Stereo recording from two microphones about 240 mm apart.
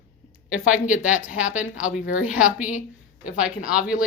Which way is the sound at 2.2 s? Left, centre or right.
Centre.